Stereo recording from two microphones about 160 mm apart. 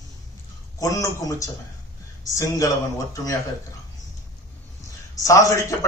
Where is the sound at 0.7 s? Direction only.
20° left (ahead or behind).